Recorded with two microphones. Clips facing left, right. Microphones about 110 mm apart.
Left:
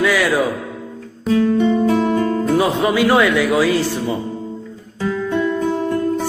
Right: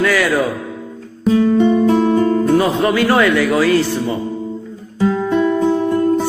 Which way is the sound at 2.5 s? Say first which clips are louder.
Right 2 dB; 10° left (ahead or behind).